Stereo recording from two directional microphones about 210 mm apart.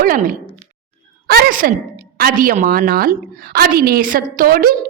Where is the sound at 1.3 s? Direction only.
45° right (ahead or behind).